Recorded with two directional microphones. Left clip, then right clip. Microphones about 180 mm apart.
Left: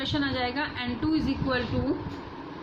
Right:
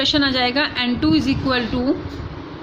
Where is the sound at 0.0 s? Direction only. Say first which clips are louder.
Right 11 dB; 50° right (ahead or behind).